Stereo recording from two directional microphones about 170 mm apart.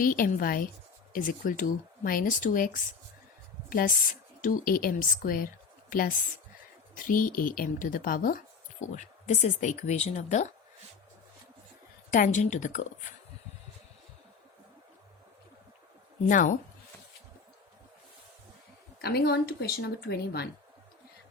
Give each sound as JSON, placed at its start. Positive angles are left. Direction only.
{"t": 0.0, "sound": "a woman's voice", "side_deg": 55}
{"t": 9.0, "sound": "speech", "side_deg": 45}
{"t": 12.1, "sound": "speech", "side_deg": 50}
{"t": 16.3, "sound": "speech", "side_deg": 50}
{"t": 19.0, "sound": "speech", "side_deg": 70}